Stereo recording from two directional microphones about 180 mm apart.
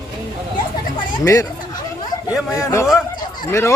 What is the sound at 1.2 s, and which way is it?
Speech, 15° left (ahead or behind).